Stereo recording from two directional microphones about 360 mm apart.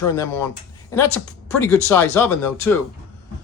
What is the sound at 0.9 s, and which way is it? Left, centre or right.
A man's voice, centre.